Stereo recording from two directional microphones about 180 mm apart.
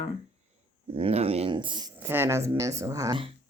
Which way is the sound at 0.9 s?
35° right (ahead or behind).